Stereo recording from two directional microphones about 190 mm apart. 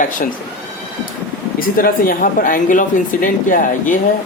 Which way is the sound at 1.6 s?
50° left (ahead or behind).